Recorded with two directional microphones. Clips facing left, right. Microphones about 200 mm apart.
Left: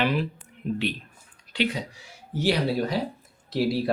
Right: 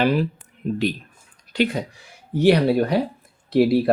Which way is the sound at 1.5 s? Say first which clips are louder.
Right 5 dB; 50° right (ahead or behind).